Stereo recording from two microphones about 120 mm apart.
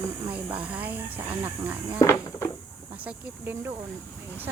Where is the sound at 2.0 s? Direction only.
25° left (ahead or behind).